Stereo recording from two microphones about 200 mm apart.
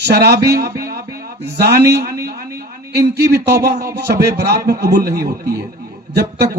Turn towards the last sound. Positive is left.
turn(degrees=-50)  # may be behind; listen again after turning